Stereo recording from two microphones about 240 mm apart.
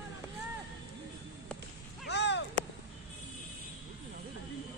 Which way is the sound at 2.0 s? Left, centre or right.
Left.